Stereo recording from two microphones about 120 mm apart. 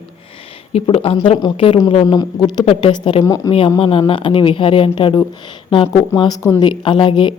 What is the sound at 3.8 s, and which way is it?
Speech, 45° left (ahead or behind).